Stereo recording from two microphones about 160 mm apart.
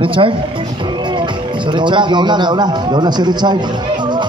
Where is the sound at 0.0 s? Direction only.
35° right (ahead or behind).